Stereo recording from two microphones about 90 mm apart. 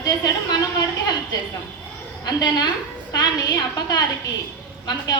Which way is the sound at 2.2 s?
50° left (ahead or behind).